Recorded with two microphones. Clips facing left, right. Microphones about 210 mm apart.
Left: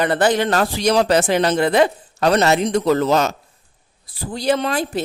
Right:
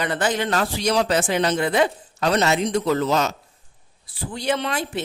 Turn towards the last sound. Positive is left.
turn(degrees=35)  # may be behind; listen again after turning